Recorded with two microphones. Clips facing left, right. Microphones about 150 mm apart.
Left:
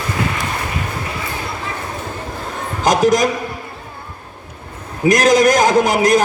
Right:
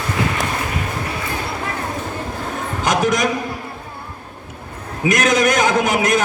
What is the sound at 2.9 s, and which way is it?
Speech, 40° left (ahead or behind).